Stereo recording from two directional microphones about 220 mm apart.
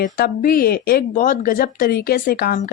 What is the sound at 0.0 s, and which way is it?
Speech, 40° left (ahead or behind).